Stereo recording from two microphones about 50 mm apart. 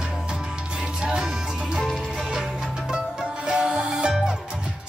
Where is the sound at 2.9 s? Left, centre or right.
Centre.